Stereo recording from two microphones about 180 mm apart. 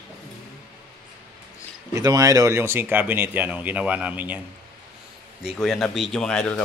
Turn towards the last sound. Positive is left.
turn(degrees=5)  # may be behind; listen again after turning